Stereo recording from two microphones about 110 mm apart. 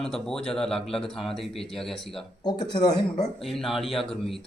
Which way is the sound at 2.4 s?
40° left (ahead or behind).